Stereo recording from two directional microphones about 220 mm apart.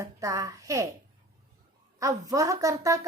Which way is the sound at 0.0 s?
15° right (ahead or behind).